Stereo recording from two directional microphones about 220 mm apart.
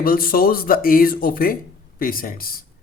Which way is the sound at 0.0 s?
40° left (ahead or behind).